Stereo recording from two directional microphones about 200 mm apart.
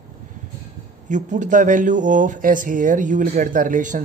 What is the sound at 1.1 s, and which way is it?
Speech, 40° right (ahead or behind).